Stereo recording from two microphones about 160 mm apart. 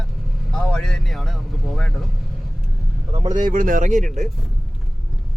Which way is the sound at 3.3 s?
55° right (ahead or behind).